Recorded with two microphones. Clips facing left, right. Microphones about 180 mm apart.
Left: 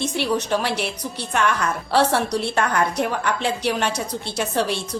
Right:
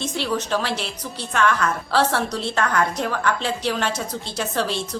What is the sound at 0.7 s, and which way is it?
Speech, 60° left (ahead or behind).